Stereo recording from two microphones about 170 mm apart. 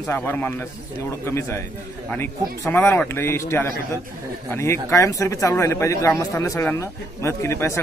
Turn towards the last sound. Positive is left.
turn(degrees=15)  # may be behind; listen again after turning